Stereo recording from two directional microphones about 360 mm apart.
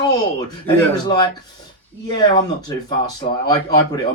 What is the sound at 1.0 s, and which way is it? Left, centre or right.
Speech, centre.